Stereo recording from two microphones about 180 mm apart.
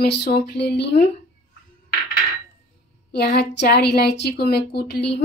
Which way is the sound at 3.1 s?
65° left (ahead or behind).